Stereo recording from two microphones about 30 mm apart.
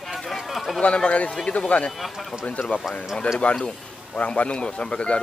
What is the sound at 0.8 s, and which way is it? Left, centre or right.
A man's voice, left.